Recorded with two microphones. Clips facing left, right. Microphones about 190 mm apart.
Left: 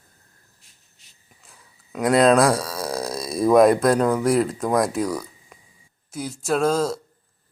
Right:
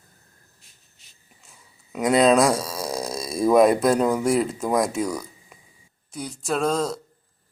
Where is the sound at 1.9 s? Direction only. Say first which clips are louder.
Left 1 dB; centre (ahead or behind).